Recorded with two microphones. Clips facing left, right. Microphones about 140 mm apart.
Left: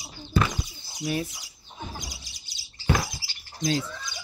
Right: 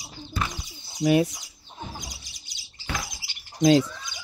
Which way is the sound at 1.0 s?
75° right (ahead or behind).